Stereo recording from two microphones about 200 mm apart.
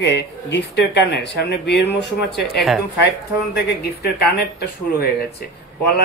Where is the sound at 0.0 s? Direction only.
60° left (ahead or behind).